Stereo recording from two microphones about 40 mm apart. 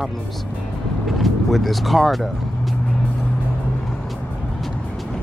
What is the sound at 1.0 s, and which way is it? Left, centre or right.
Speech, centre.